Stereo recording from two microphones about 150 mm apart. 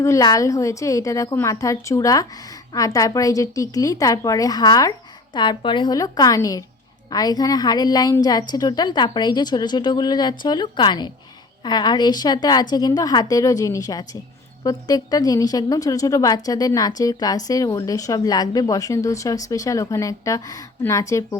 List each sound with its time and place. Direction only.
0.0 s a woman's voice: 20° left (ahead or behind)